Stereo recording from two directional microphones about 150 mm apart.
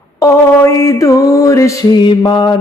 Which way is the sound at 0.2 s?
20° left (ahead or behind).